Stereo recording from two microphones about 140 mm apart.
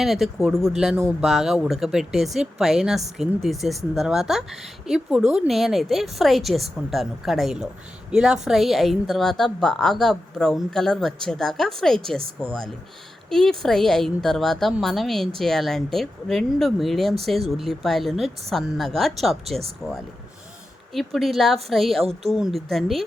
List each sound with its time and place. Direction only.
0.0 s a woman's voice: 5° right (ahead or behind)
0.3 s speech: 15° right (ahead or behind)
1.2 s a woman's voice: centre (ahead or behind)
13.3 s a woman's voice: 5° left (ahead or behind)